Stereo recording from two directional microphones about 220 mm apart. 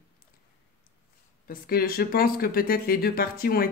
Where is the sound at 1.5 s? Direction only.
45° left (ahead or behind).